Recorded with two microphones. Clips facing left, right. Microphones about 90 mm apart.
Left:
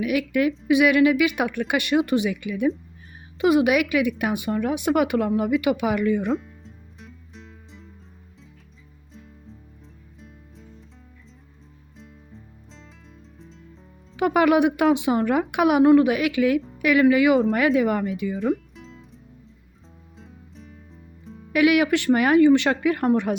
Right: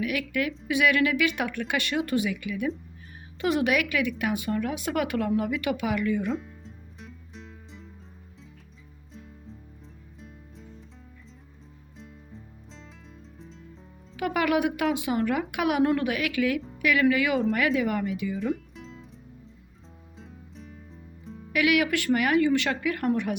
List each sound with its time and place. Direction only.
0.0 s a woman's voice: 20° left (ahead or behind)
3.4 s a woman's voice: 10° left (ahead or behind)
6.3 s music: centre (ahead or behind)
10.2 s music: centre (ahead or behind)
11.9 s music: centre (ahead or behind)
14.2 s speech: 25° left (ahead or behind)
17.5 s speech: 30° left (ahead or behind)
18.4 s music: centre (ahead or behind)
20.1 s music: centre (ahead or behind)
21.5 s speech: 25° left (ahead or behind)